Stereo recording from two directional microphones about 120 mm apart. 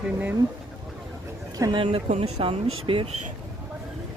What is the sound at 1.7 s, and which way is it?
Speech, 45° right (ahead or behind).